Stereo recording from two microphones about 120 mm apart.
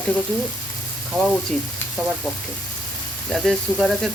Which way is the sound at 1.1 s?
15° right (ahead or behind).